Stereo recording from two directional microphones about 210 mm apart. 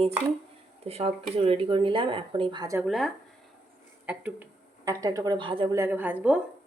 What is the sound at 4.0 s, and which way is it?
A woman's voice, 10° right (ahead or behind).